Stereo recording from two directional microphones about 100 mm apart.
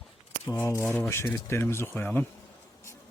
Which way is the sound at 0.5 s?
25° left (ahead or behind).